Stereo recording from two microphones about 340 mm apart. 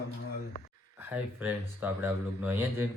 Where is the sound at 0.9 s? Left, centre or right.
Centre.